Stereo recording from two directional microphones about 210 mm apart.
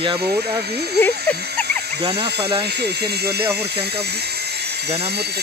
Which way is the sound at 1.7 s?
50° right (ahead or behind).